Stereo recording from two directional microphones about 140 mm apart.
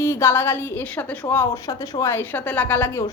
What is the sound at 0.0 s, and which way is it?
A woman's voice, 15° left (ahead or behind).